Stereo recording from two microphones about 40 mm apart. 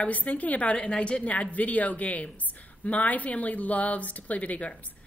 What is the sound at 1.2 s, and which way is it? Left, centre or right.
A woman's voice, left.